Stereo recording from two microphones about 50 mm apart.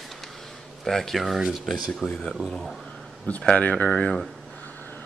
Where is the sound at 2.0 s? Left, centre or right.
Centre.